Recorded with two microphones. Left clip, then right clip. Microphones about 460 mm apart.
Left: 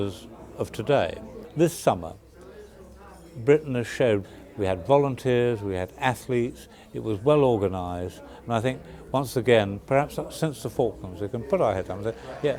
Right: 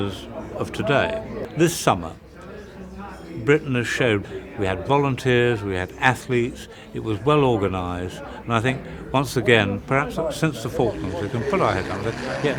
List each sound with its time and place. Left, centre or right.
0.6 s a man's voice: left
3.4 s a man's voice: left
12.1 s speech: centre